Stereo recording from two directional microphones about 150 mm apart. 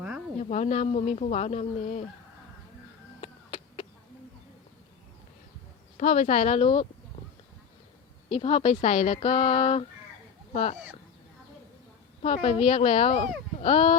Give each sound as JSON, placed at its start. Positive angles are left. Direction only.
{"t": 0.3, "sound": "speech", "side_deg": 45}
{"t": 3.2, "sound": "a sound", "side_deg": 40}
{"t": 6.0, "sound": "speech", "side_deg": 50}
{"t": 8.3, "sound": "speech", "side_deg": 35}
{"t": 10.5, "sound": "speech", "side_deg": 50}
{"t": 12.2, "sound": "speech", "side_deg": 40}